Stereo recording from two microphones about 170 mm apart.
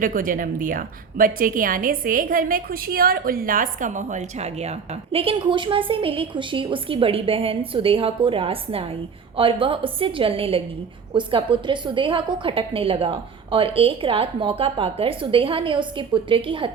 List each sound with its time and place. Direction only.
0.0 s a woman's voice: 55° right (ahead or behind); by 16.7 s 30° right (ahead or behind)